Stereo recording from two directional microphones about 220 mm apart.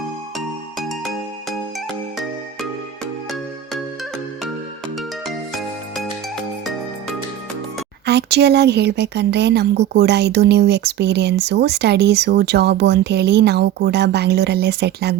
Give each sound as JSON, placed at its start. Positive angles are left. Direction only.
{"t": 0.3, "sound": "music", "side_deg": 0}
{"t": 8.0, "sound": "a woman's voice", "side_deg": -50}